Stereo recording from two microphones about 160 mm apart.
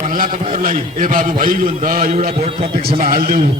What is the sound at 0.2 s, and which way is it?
A man's voice, 60° right (ahead or behind).